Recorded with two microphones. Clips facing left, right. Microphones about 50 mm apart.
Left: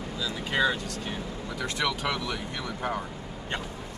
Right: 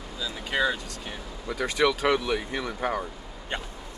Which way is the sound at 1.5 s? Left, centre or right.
Right.